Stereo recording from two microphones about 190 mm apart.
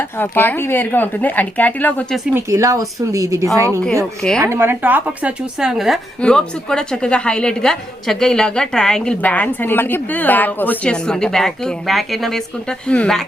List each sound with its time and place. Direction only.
0.0 s speech: 10° left (ahead or behind)
2.3 s a woman's voice: 15° right (ahead or behind); by 13.2 s 5° left (ahead or behind)